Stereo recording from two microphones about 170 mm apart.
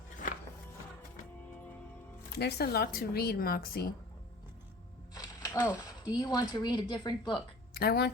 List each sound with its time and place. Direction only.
2.4 s speech: 65° left (ahead or behind)
5.1 s a sound: 20° left (ahead or behind)
6.1 s speech: 25° left (ahead or behind)
7.7 s speech: 65° left (ahead or behind)